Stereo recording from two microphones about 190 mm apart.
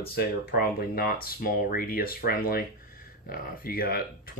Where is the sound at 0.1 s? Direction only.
55° left (ahead or behind).